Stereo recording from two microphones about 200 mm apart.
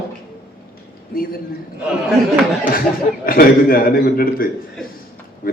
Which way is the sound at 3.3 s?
45° left (ahead or behind).